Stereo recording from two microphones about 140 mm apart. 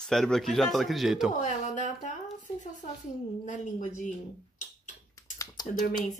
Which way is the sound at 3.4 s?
60° left (ahead or behind).